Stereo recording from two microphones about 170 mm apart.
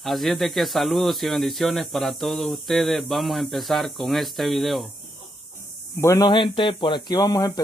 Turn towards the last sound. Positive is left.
turn(degrees=20)  # may be behind; listen again after turning